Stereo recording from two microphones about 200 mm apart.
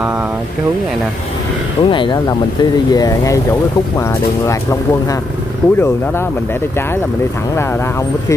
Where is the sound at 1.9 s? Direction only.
25° left (ahead or behind).